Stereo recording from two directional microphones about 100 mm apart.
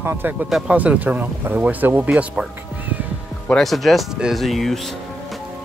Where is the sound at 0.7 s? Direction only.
15° right (ahead or behind).